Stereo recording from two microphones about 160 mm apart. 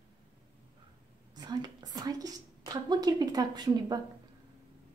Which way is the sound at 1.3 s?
25° right (ahead or behind).